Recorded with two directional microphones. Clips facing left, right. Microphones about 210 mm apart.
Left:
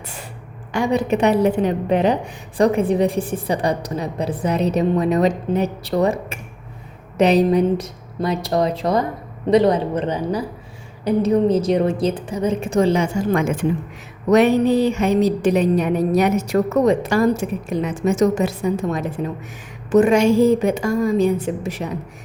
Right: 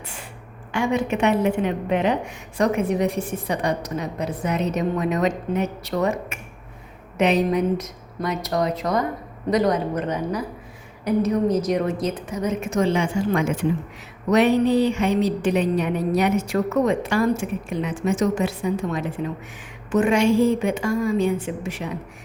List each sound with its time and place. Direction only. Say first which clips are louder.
0.7 s a woman's voice: left 3 dB; 35° left (ahead or behind)